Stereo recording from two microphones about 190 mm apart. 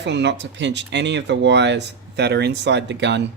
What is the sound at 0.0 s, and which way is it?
Speech, 65° right (ahead or behind).